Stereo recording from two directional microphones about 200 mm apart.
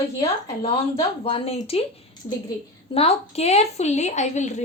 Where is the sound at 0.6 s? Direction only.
25° left (ahead or behind).